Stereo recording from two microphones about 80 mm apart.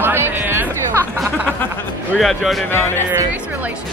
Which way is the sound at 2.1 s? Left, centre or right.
Centre.